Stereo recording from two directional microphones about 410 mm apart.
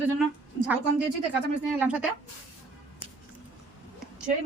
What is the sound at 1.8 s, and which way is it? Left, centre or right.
Speech, centre.